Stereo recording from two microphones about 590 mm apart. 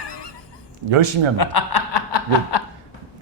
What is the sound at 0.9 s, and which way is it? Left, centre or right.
Speech, right.